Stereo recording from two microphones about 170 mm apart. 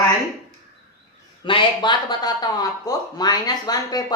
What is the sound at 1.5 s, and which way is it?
Speech, 30° left (ahead or behind).